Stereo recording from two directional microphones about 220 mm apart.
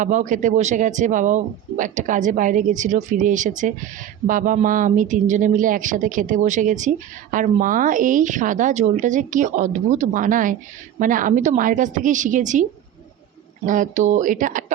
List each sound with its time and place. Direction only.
0.0 s speech: 35° right (ahead or behind)
13.7 s speech: 35° right (ahead or behind)